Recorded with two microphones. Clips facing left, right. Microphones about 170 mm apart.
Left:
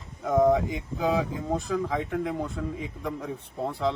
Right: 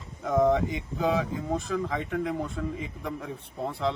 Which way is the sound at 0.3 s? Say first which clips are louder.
Left 2 dB; centre (ahead or behind).